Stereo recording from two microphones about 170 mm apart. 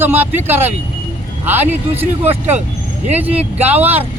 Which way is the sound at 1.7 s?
10° right (ahead or behind).